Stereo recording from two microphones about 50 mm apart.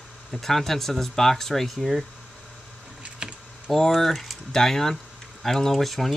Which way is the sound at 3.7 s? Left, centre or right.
Centre.